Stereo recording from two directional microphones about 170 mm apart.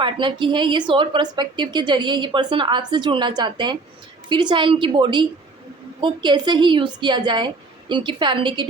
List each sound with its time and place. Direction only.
0.0 s a woman's voice: 30° right (ahead or behind)